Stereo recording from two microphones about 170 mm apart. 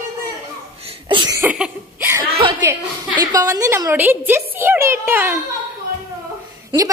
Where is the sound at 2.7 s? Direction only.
20° right (ahead or behind).